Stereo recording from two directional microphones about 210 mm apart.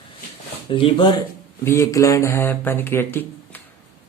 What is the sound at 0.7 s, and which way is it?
Speech, 25° left (ahead or behind).